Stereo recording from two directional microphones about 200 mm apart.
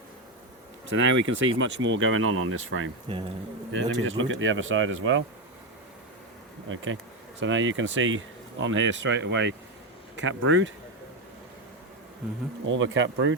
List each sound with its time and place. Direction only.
0.9 s speech: 70° right (ahead or behind); by 2.9 s 90° right
3.7 s speech: 75° right (ahead or behind)
6.9 s speech: 75° right (ahead or behind)
12.6 s speech: 70° right (ahead or behind)